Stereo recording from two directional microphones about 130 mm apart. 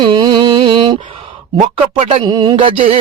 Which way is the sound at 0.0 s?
35° right (ahead or behind).